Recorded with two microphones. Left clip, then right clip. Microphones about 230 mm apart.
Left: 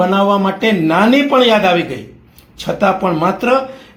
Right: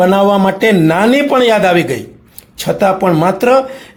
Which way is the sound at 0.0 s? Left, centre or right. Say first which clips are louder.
Right 3 dB; right.